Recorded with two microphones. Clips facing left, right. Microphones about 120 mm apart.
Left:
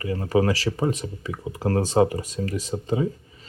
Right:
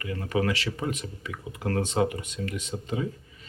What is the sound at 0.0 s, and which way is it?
Speech, 30° left (ahead or behind).